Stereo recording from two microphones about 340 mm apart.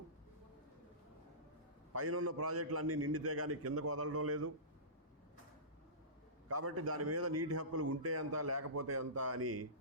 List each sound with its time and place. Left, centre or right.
1.9 s a man's voice: right
6.5 s a man's voice: right